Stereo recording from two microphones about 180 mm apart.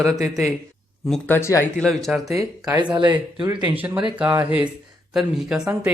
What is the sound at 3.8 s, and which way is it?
Speech, 10° right (ahead or behind).